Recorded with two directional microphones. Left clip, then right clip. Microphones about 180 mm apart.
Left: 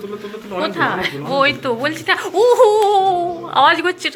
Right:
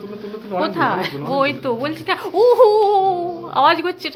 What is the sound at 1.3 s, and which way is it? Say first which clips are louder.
Speech: left 3 dB; 15° right (ahead or behind).